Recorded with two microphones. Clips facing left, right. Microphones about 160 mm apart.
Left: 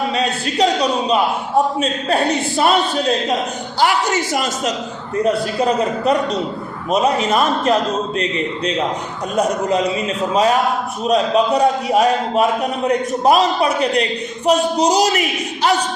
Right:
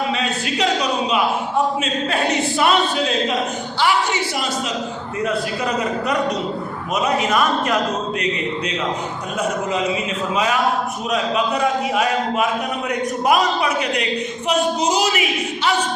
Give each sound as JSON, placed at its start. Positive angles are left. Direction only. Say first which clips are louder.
{"t": 0.4, "sound": "a man's voice", "louder": "left 4 dB", "side_deg": 35}
{"t": 5.1, "sound": "a man's voice", "louder": "left 6 dB", "side_deg": 35}
{"t": 9.3, "sound": "a man's voice", "louder": "left 5 dB", "side_deg": 40}